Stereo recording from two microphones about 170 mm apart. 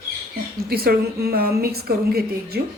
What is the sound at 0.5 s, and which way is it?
A woman's voice, 65° right (ahead or behind).